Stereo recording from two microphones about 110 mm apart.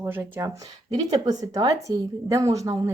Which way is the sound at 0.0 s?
20° right (ahead or behind).